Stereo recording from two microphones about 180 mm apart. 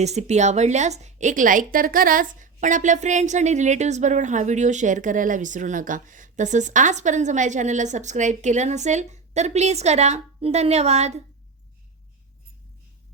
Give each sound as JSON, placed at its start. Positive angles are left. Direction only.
{"t": 0.0, "sound": "a woman's voice", "side_deg": -40}